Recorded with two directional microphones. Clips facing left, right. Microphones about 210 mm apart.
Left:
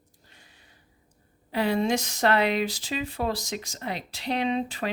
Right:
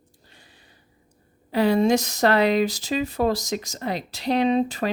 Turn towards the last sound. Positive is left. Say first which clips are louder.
# right 6 dB
turn(degrees=-40)  # may be behind; listen again after turning